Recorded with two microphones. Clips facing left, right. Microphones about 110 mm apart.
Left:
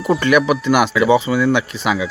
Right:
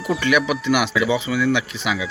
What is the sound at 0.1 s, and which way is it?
Speech, 45° left (ahead or behind).